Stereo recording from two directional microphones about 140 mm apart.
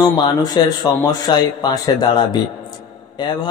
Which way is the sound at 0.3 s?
30° left (ahead or behind).